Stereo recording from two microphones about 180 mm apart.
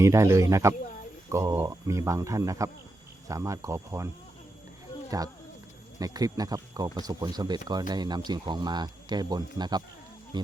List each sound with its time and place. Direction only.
0.0 s speech: 15° right (ahead or behind)
5.1 s speech: 20° right (ahead or behind)